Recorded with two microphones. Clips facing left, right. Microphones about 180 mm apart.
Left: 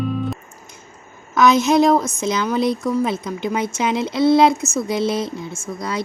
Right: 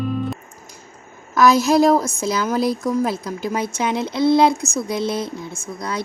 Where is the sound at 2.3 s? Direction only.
5° right (ahead or behind).